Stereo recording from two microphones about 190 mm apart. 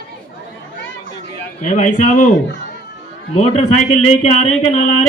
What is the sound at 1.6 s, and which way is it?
Speech, 40° left (ahead or behind).